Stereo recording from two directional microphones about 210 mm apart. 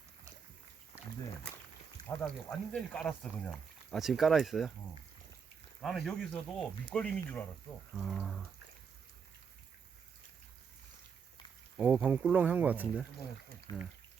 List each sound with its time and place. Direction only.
2.0 s speech: 5° left (ahead or behind)
5.8 s speech: centre (ahead or behind)
11.8 s speech: 5° right (ahead or behind)
13.7 s speech: 20° left (ahead or behind)